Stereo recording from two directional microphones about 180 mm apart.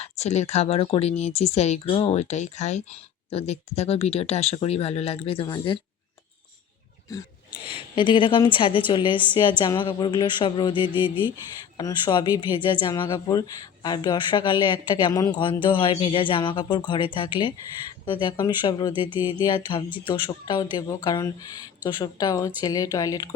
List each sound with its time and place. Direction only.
0.0 s speech: 40° left (ahead or behind)
7.1 s a woman's voice: 20° left (ahead or behind)
7.6 s a woman's voice: 30° left (ahead or behind)